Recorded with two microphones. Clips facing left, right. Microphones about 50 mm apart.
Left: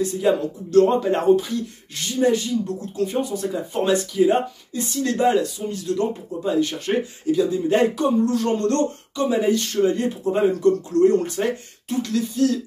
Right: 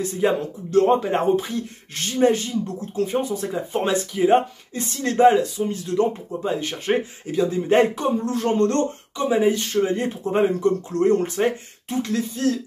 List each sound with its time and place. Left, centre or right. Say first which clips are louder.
0.2 s speech: right 2 dB; right